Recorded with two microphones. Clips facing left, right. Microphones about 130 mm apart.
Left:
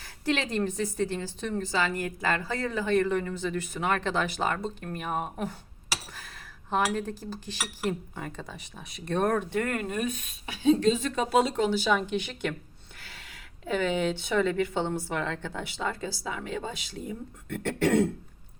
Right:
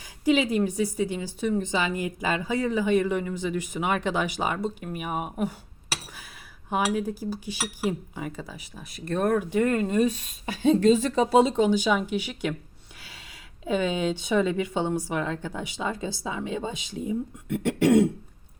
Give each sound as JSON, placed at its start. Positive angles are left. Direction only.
{"t": 0.0, "sound": "speech", "side_deg": -10}
{"t": 6.7, "sound": "speech", "side_deg": -10}
{"t": 11.2, "sound": "speech", "side_deg": -25}
{"t": 13.0, "sound": "a sound", "side_deg": -10}
{"t": 13.7, "sound": "speech", "side_deg": -15}